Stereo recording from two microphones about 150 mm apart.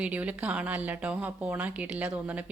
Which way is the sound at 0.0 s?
10° right (ahead or behind).